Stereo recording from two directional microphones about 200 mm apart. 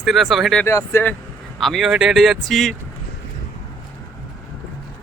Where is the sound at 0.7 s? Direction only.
15° left (ahead or behind).